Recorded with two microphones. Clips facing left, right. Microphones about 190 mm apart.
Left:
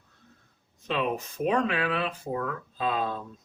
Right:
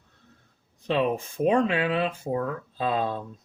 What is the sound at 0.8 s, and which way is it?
Speech, 30° right (ahead or behind).